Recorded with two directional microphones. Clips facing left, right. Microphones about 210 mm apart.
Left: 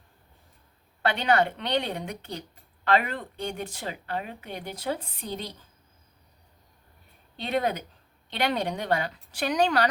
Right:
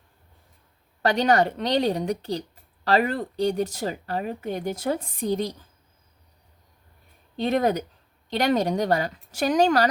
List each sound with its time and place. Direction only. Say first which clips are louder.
1.0 s speech: right 4 dB; 40° right (ahead or behind)
7.3 s a woman's voice: right 5 dB; 45° right (ahead or behind)